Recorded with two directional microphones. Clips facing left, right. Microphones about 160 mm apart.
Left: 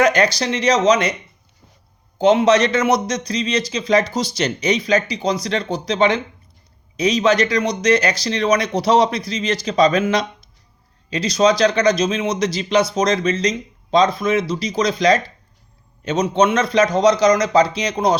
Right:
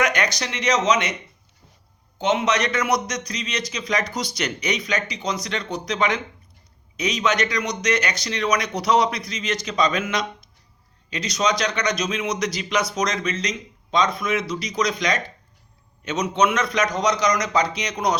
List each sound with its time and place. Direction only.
0.0 s speech: 30° left (ahead or behind)
2.1 s a man's voice: 35° left (ahead or behind)